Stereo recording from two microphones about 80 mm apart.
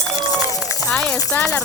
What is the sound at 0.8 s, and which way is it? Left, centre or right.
Music, centre.